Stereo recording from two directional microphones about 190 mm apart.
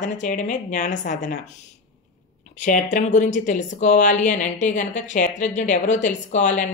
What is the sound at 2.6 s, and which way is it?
Speech, 40° left (ahead or behind).